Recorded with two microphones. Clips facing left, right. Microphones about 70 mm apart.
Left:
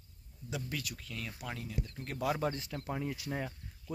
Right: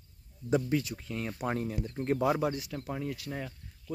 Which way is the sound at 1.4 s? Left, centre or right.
Right.